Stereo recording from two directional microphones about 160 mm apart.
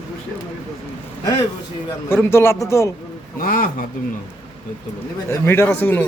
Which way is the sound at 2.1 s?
15° left (ahead or behind).